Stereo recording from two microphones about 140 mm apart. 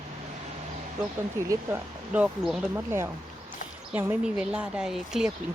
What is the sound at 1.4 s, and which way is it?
Speech, 20° right (ahead or behind).